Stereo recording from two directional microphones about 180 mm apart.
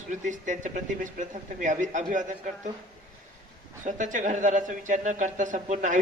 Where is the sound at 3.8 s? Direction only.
45° right (ahead or behind).